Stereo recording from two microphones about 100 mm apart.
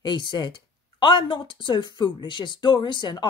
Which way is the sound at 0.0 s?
50° left (ahead or behind).